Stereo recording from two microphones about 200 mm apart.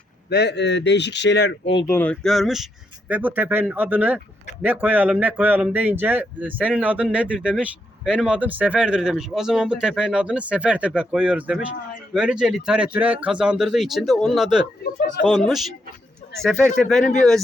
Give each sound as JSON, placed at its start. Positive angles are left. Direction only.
{"t": 0.3, "sound": "a man's voice", "side_deg": 55}
{"t": 1.8, "sound": "a man's voice", "side_deg": 10}